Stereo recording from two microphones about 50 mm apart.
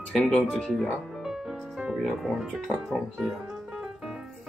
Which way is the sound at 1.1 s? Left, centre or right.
Centre.